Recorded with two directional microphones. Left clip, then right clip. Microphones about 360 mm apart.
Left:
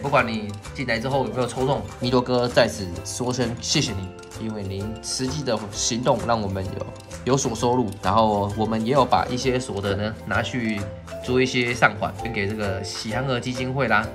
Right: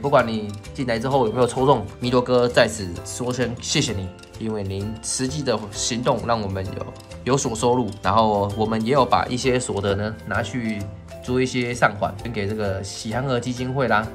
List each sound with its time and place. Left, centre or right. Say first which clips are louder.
0.1 s speech: right 2 dB; centre